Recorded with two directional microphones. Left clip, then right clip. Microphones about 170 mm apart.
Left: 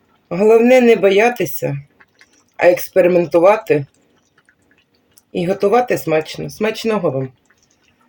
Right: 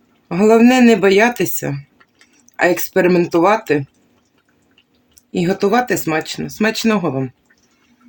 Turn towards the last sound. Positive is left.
turn(degrees=-45)  # may be behind; listen again after turning